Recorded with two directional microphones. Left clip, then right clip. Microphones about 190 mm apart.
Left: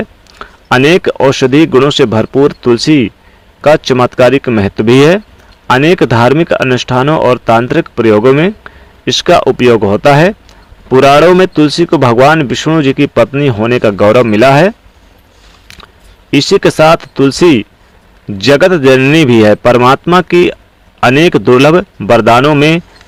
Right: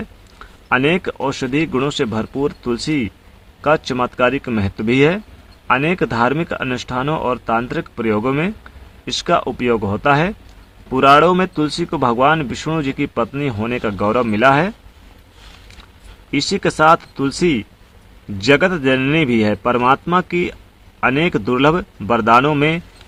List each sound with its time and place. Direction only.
0.3 s speech: 45° left (ahead or behind)
16.3 s speech: 40° left (ahead or behind)